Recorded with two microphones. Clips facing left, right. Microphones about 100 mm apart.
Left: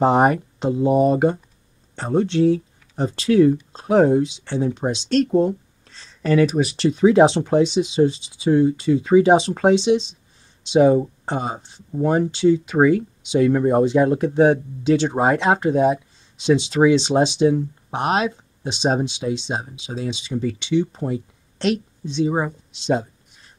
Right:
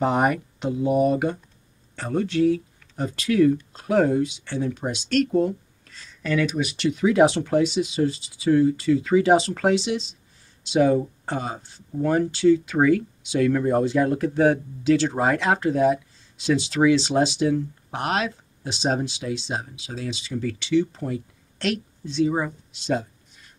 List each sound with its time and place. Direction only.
0.0 s speech: 30° left (ahead or behind)